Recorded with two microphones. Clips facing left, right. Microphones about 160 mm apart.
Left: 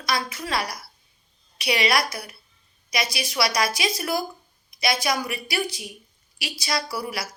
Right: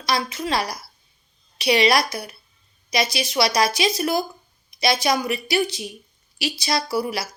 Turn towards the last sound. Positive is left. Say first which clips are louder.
# right 5 dB
turn(degrees=-25)  # may be behind; listen again after turning